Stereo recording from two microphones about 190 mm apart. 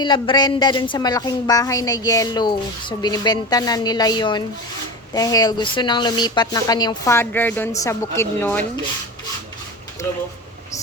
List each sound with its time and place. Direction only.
0.0 s a woman's voice: 25° left (ahead or behind)